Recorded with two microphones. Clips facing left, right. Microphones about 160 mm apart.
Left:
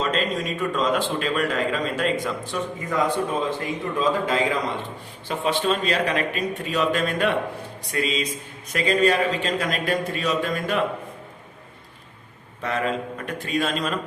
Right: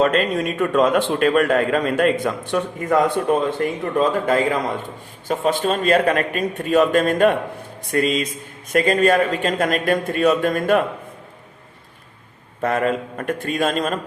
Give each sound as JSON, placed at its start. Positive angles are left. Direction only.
{"t": 0.0, "sound": "a man's voice", "side_deg": -60}
{"t": 12.6, "sound": "a man's voice", "side_deg": -50}